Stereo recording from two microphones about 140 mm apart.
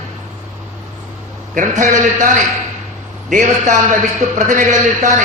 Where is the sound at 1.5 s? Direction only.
65° right (ahead or behind).